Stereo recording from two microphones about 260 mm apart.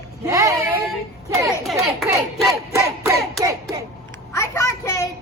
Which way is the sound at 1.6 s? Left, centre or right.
Centre.